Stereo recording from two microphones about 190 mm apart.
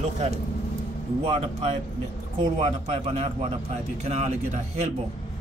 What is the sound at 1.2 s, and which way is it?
Speech, 30° right (ahead or behind).